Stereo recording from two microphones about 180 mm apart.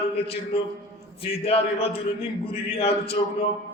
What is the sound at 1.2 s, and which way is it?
A man's voice, 30° left (ahead or behind).